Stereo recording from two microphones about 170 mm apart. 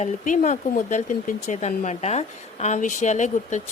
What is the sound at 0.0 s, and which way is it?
A woman's voice, 45° left (ahead or behind).